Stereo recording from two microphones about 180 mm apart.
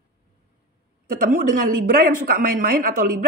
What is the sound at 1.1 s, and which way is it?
Speech, 50° right (ahead or behind).